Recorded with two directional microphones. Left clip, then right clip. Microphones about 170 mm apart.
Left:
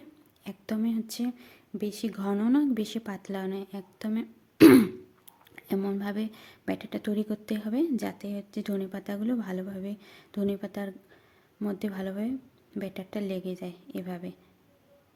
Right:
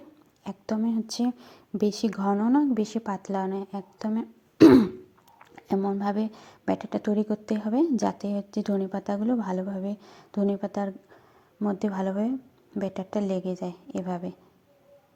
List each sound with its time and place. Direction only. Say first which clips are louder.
0.4 s a woman's voice: right 3 dB; 5° left (ahead or behind)
1.1 s speech: right 5 dB; 10° right (ahead or behind)
2.3 s a woman's voice: right 2 dB; 15° left (ahead or behind)
6.0 s a woman's voice: right 6 dB; centre (ahead or behind)